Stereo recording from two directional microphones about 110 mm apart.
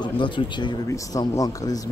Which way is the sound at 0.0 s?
45° left (ahead or behind).